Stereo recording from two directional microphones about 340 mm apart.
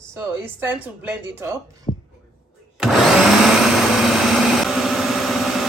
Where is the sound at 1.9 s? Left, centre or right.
Centre.